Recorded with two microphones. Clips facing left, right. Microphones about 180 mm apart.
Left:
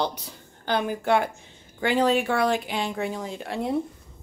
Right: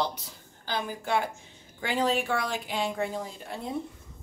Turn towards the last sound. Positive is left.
turn(degrees=75)  # may be behind; listen again after turning